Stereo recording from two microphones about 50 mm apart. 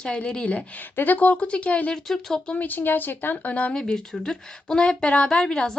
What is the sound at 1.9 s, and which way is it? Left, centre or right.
Speech, centre.